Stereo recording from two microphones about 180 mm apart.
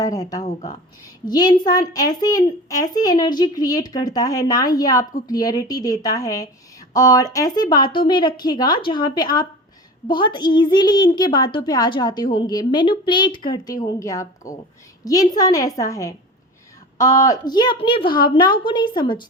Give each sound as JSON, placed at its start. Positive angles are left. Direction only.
{"t": 0.0, "sound": "a woman's voice", "side_deg": 20}